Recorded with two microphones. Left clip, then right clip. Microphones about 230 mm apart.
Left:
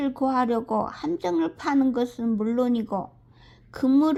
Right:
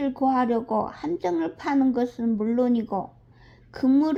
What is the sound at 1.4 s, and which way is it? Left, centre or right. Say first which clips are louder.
Speech: left 1 dB; left.